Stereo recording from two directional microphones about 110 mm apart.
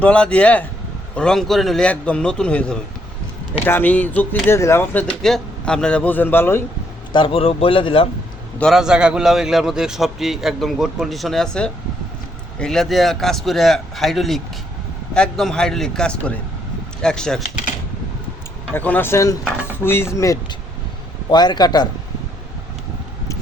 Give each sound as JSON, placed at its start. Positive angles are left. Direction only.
{"t": 0.0, "sound": "a man's voice", "side_deg": 10}
{"t": 5.2, "sound": "a man's voice", "side_deg": 5}
{"t": 7.1, "sound": "speech", "side_deg": 50}
{"t": 8.7, "sound": "a man's voice", "side_deg": -5}
{"t": 18.7, "sound": "speech", "side_deg": 15}
{"t": 21.2, "sound": "a man's voice", "side_deg": 40}